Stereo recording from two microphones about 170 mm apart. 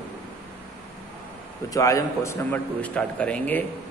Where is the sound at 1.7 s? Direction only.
20° left (ahead or behind).